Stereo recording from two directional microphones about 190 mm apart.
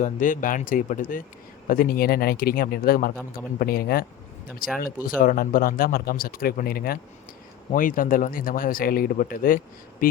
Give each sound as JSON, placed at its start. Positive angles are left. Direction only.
{"t": 0.0, "sound": "speech", "side_deg": 45}